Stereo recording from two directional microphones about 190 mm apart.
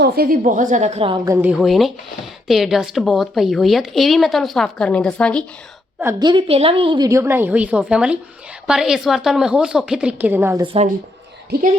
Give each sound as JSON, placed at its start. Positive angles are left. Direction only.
{"t": 0.0, "sound": "a woman's voice", "side_deg": -50}
{"t": 6.0, "sound": "a woman's voice", "side_deg": -20}
{"t": 10.6, "sound": "speech", "side_deg": -30}